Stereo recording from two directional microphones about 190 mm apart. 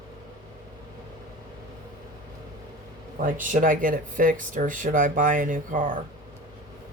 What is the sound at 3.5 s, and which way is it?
Speech, 45° right (ahead or behind).